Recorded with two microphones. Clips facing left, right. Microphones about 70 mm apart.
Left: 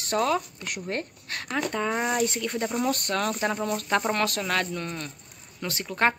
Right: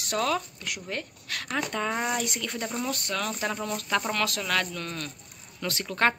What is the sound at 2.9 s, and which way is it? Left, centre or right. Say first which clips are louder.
Speech: left 4 dB; left.